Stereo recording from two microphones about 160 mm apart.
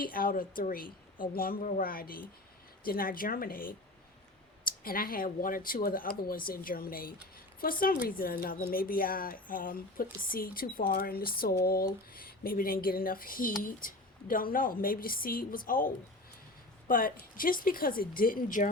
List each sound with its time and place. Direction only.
0.0 s speech: 65° left (ahead or behind)
16.9 s speech: 60° left (ahead or behind)